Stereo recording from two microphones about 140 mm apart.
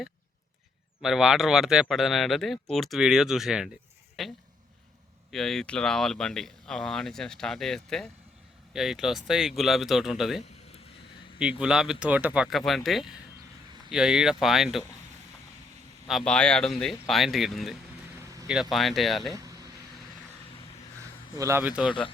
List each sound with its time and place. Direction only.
1.0 s speech: 5° right (ahead or behind)
11.6 s speech: 5° right (ahead or behind)
16.0 s speech: 5° left (ahead or behind)
19.3 s speech: 25° right (ahead or behind)
21.3 s speech: 20° right (ahead or behind)
21.6 s speech: 10° right (ahead or behind)